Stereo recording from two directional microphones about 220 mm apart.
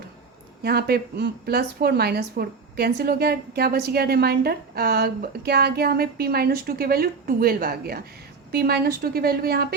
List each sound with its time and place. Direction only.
0.6 s speech: 45° right (ahead or behind)